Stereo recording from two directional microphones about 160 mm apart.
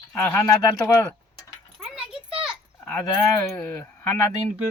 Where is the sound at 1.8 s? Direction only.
5° right (ahead or behind).